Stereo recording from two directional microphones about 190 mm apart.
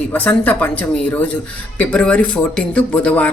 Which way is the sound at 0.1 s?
10° left (ahead or behind).